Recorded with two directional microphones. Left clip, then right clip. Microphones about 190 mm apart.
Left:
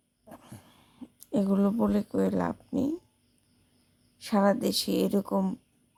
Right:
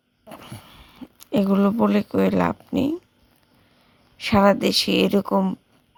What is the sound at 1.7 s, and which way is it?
Speech, 15° right (ahead or behind).